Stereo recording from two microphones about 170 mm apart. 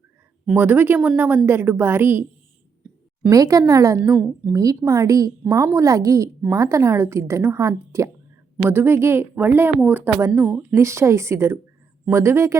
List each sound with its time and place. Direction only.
0.4 s a woman's voice: 10° right (ahead or behind)
3.2 s a woman's voice: 20° right (ahead or behind)
4.1 s a woman's voice: 5° right (ahead or behind)
4.5 s a woman's voice: 20° right (ahead or behind)